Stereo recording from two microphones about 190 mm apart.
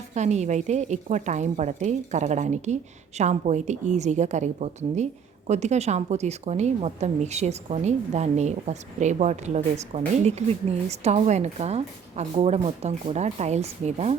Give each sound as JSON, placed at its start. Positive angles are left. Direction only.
{"t": 0.1, "sound": "speech", "side_deg": -35}